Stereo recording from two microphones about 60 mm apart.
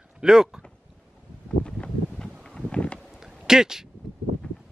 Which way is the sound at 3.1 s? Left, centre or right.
Centre.